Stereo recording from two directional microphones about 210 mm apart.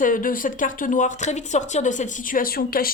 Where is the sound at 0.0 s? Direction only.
40° left (ahead or behind).